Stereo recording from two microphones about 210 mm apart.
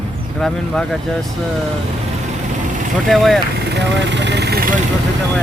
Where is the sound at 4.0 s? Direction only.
55° right (ahead or behind).